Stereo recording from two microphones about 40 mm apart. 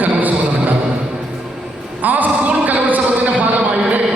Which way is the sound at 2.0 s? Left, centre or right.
Right.